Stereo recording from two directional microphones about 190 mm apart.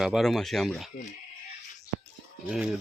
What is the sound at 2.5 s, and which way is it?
Speech, 5° right (ahead or behind).